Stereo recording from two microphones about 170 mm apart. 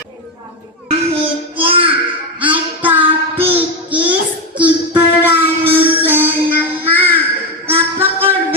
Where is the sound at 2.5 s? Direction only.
10° right (ahead or behind).